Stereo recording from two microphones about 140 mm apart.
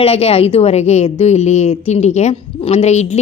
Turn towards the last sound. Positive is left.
turn(degrees=55)  # may be behind; listen again after turning